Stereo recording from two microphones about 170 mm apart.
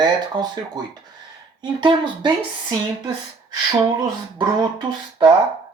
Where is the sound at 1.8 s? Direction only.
25° right (ahead or behind).